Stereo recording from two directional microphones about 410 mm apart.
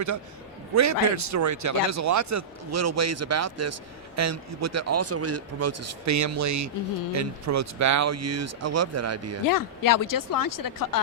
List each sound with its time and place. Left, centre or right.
0.7 s a man's voice: right
9.5 s speech: left